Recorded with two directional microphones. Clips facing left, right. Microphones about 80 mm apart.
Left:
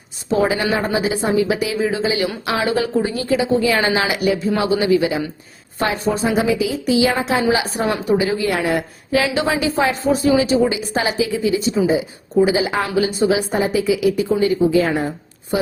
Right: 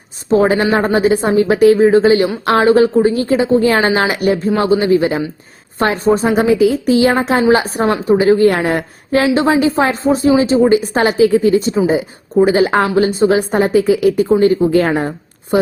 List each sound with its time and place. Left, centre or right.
0.3 s a woman's voice: right
2.6 s a woman's voice: right